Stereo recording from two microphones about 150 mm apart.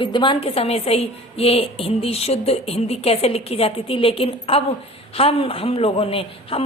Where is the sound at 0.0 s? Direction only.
30° left (ahead or behind).